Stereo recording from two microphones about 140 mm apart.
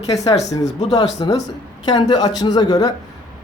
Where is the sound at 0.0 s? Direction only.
25° left (ahead or behind).